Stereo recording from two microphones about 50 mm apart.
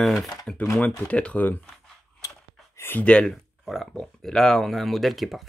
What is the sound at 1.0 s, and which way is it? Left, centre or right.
Speech, left.